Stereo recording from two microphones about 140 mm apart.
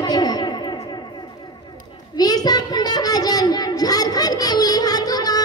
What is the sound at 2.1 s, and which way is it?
Child singing, 30° left (ahead or behind).